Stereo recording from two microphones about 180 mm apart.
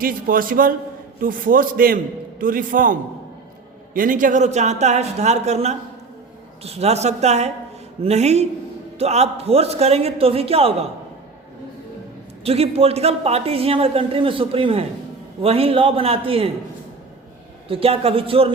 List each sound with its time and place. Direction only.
0.0 s a man's voice: 50° right (ahead or behind); by 10.8 s 35° right (ahead or behind)
12.5 s speech: 35° right (ahead or behind)
17.7 s speech: 30° right (ahead or behind)